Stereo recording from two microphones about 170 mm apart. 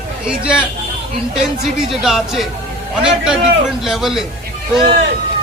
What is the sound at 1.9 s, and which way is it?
Speech, centre (ahead or behind).